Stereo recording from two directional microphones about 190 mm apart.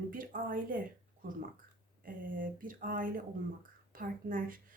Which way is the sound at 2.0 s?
45° right (ahead or behind).